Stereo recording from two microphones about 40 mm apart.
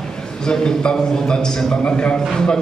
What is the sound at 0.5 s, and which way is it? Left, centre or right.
A man's voice, centre.